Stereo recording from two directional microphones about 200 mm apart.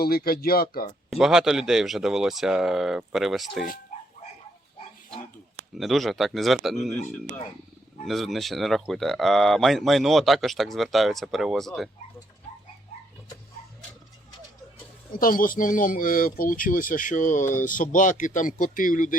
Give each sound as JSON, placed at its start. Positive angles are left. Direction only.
{"t": 0.0, "sound": "speech", "side_deg": 50}
{"t": 1.1, "sound": "speech", "side_deg": 0}
{"t": 3.9, "sound": "dog", "side_deg": 40}
{"t": 5.7, "sound": "speech", "side_deg": 0}
{"t": 6.9, "sound": "speech", "side_deg": 35}
{"t": 8.0, "sound": "speech", "side_deg": 0}
{"t": 15.2, "sound": "speech", "side_deg": 45}